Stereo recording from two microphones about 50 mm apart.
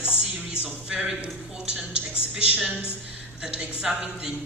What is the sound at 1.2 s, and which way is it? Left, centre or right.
Speech, centre.